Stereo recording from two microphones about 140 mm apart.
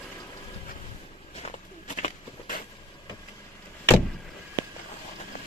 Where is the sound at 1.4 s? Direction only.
55° left (ahead or behind).